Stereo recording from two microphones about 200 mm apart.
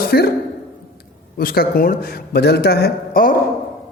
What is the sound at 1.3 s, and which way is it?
A man's voice, 50° left (ahead or behind).